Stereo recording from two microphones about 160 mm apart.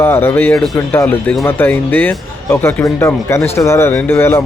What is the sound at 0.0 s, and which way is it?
Speech, 15° left (ahead or behind).